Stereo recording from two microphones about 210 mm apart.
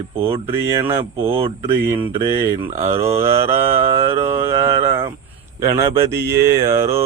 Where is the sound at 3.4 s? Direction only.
30° right (ahead or behind).